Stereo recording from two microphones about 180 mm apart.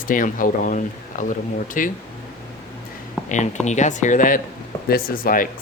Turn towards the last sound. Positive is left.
turn(degrees=50)  # may be behind; listen again after turning